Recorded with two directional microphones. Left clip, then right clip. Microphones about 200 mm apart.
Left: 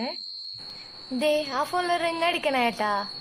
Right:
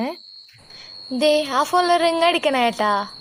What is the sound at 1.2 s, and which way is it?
A woman's voice, 35° right (ahead or behind).